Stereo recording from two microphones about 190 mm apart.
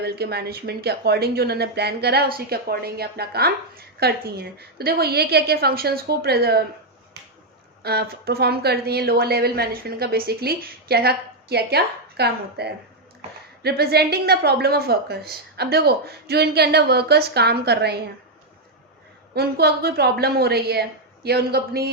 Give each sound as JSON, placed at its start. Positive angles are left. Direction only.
{"t": 0.0, "sound": "speech", "side_deg": -60}
{"t": 7.8, "sound": "speech", "side_deg": -55}
{"t": 19.3, "sound": "speech", "side_deg": -55}